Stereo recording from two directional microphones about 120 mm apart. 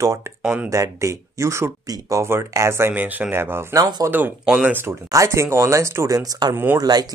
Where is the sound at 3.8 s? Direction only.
35° right (ahead or behind).